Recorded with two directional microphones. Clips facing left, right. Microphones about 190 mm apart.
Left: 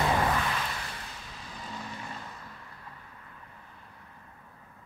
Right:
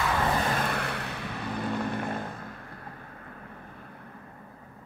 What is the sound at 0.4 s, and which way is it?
Vehicle, 50° right (ahead or behind).